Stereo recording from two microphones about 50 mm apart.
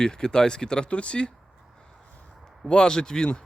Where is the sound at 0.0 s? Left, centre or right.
Centre.